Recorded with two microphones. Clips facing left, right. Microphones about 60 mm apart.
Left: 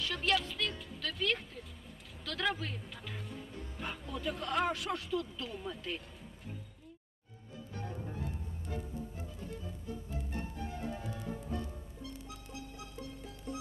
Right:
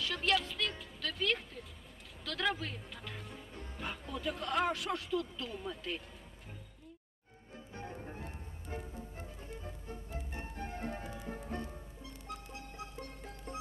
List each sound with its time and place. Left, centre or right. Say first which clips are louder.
0.0 s a woman's voice: even; centre
7.7 s music: left 2 dB; right